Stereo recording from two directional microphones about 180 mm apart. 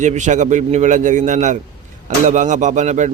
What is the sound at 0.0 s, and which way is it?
A man's voice, 40° right (ahead or behind).